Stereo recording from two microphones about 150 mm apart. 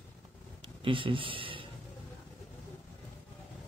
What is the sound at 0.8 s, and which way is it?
Speech, 35° right (ahead or behind).